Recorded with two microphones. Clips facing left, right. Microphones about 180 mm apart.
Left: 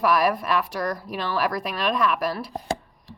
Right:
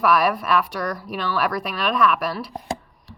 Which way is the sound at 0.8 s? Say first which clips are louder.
Right 1 dB; 25° left (ahead or behind).